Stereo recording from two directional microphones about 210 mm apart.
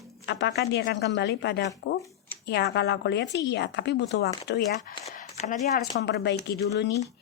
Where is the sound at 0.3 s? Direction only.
55° left (ahead or behind).